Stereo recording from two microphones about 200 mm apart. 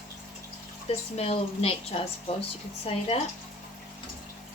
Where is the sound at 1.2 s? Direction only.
30° left (ahead or behind).